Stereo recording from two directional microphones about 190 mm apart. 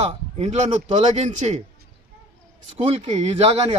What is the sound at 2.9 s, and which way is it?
Speech, 35° right (ahead or behind).